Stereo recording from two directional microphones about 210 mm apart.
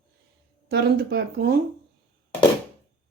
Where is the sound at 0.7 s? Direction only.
50° right (ahead or behind).